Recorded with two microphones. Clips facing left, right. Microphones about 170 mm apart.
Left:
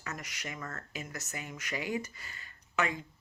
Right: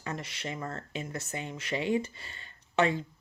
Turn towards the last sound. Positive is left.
turn(degrees=-30)  # may be behind; listen again after turning